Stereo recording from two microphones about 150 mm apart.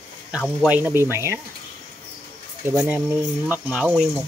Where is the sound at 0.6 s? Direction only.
10° right (ahead or behind).